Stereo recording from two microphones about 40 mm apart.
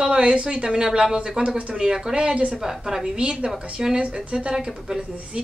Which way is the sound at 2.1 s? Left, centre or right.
Right.